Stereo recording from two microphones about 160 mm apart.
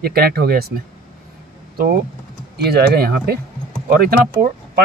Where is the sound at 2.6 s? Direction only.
75° right (ahead or behind).